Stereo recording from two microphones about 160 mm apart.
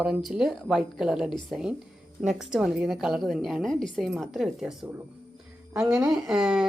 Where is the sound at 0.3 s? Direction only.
Centre (ahead or behind).